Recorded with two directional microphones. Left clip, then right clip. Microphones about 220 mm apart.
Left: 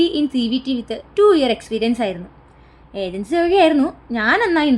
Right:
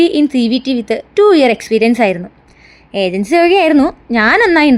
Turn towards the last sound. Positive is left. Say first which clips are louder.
# right 7 dB
turn(degrees=-25)  # may be behind; listen again after turning